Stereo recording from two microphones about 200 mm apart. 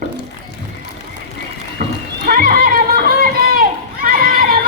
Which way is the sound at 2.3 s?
45° right (ahead or behind).